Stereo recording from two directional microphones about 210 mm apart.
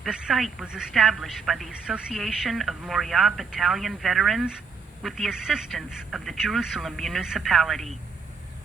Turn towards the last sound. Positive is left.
turn(degrees=0)  # may be behind; listen again after turning